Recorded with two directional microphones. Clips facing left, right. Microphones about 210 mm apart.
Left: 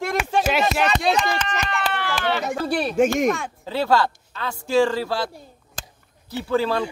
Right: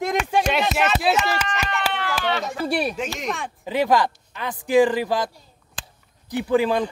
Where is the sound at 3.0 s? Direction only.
50° left (ahead or behind).